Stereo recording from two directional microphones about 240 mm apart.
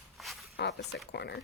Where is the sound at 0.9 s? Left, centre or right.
Left.